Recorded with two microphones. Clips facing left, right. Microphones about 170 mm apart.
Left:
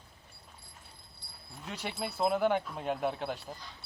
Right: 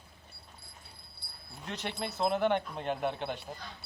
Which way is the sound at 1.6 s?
5° left (ahead or behind).